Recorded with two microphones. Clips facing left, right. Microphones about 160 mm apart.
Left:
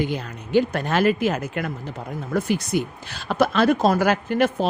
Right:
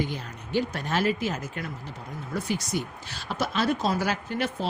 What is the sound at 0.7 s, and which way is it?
Speech, 65° left (ahead or behind).